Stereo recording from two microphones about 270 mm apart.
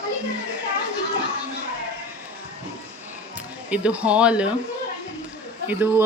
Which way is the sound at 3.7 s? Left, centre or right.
Centre.